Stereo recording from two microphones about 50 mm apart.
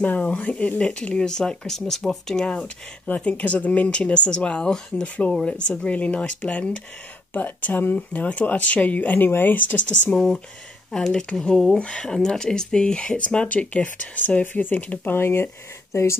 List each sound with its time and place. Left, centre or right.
0.0 s speech: left; by 2.4 s centre
2.4 s speech: left
5.0 s speech: left
7.3 s speech: left
10.1 s speech: centre; by 15.1 s left
15.1 s speech: left